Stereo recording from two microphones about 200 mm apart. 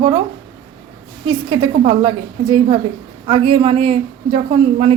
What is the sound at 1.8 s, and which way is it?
A woman's voice, 25° right (ahead or behind).